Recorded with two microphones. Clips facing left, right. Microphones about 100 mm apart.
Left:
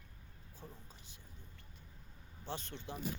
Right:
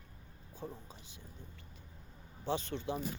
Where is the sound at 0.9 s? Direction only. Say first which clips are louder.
Right 5 dB; 90° right.